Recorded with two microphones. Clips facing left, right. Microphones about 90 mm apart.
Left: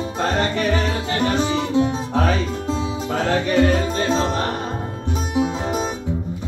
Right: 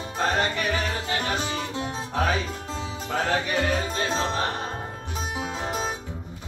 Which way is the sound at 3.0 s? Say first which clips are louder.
Left 2 dB; 30° left (ahead or behind).